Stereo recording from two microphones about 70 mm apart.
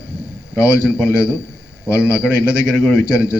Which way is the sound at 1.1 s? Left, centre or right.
Left.